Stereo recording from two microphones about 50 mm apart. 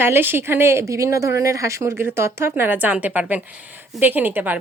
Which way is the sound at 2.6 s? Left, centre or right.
Right.